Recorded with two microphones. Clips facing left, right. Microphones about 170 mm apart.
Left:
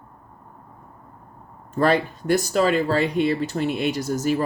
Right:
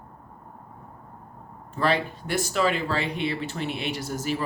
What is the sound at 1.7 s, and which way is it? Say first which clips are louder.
Speech: left 5 dB; 45° left (ahead or behind).